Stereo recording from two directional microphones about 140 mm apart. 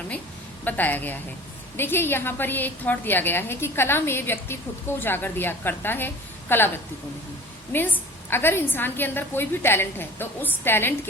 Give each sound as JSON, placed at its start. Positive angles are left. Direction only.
{"t": 0.6, "sound": "a woman's voice", "side_deg": 10}
{"t": 7.7, "sound": "a woman's voice", "side_deg": 15}